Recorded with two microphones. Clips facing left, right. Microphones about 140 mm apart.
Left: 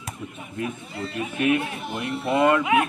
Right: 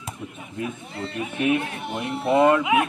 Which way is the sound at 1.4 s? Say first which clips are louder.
Even; 25° right (ahead or behind).